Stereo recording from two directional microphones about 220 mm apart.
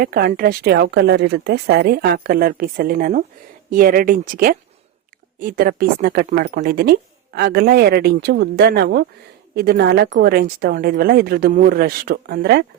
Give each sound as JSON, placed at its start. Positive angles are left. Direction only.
{"t": 0.0, "sound": "a woman's voice", "side_deg": -45}